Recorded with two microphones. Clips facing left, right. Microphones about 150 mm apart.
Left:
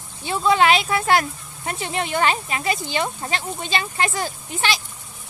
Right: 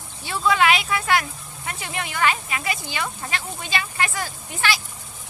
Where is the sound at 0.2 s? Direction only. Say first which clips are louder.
Left 3 dB; 25° left (ahead or behind).